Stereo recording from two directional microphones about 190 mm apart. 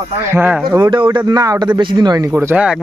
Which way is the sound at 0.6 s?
20° right (ahead or behind).